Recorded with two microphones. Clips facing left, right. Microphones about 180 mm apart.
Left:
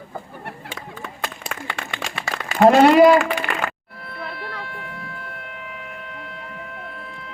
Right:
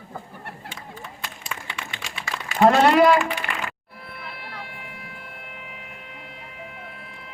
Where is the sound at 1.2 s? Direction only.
60° left (ahead or behind).